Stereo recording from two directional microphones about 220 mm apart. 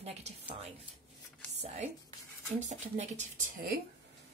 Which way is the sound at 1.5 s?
30° right (ahead or behind).